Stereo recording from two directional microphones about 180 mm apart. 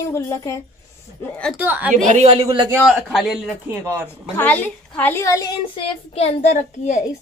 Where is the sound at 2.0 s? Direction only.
35° right (ahead or behind).